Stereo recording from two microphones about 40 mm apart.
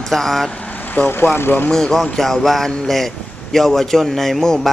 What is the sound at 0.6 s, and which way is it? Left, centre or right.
Vehicle, left.